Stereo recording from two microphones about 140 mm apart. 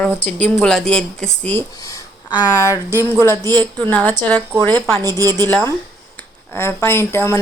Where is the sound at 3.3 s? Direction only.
25° right (ahead or behind).